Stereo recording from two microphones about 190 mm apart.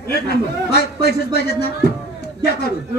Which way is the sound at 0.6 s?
55° left (ahead or behind).